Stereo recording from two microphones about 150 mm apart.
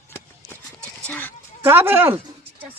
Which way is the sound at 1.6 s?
15° right (ahead or behind).